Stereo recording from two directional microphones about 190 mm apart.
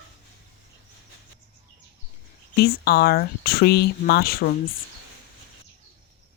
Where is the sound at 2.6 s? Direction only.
55° left (ahead or behind).